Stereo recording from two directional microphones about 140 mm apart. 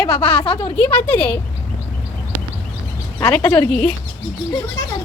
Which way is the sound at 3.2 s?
10° left (ahead or behind).